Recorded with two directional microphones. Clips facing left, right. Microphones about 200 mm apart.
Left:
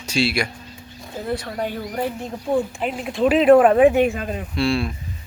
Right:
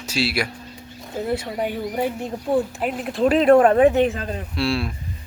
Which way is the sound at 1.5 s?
5° right (ahead or behind).